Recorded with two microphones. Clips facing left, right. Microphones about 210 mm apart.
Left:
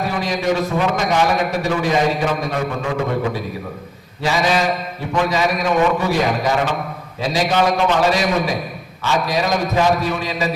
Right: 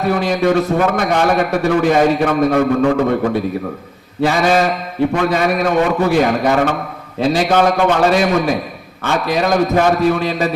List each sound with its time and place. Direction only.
0.1 s a man's voice: 55° right (ahead or behind)
4.2 s a man's voice: 55° right (ahead or behind)